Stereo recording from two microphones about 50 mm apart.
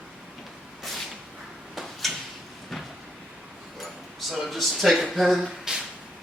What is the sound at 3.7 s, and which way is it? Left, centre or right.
Speech, centre.